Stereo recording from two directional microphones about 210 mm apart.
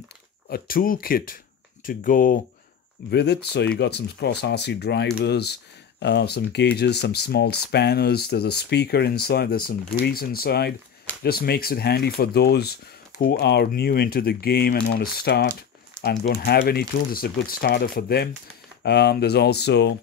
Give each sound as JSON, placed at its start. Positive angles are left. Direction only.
{"t": 0.5, "sound": "speech", "side_deg": 40}
{"t": 3.1, "sound": "speech", "side_deg": 50}